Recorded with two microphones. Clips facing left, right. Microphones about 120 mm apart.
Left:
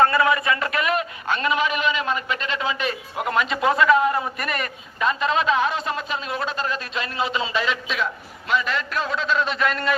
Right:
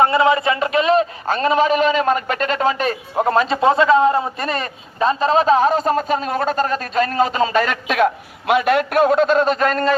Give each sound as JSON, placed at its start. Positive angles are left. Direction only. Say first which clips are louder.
{"t": 0.0, "sound": "a man's voice", "louder": "right 4 dB", "side_deg": -25}
{"t": 1.3, "sound": "a man's voice", "louder": "right 6 dB", "side_deg": -35}